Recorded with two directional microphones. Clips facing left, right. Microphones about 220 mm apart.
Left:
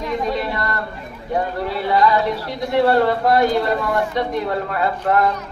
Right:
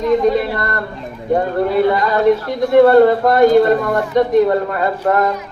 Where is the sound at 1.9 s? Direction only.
50° right (ahead or behind).